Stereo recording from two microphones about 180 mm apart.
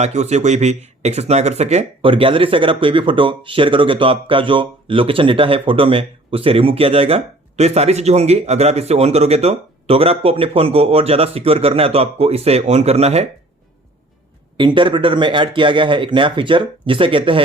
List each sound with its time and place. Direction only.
0.0 s speech: 40° right (ahead or behind)
14.5 s speech: 25° right (ahead or behind)